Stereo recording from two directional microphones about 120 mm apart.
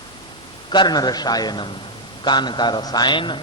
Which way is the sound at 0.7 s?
35° left (ahead or behind).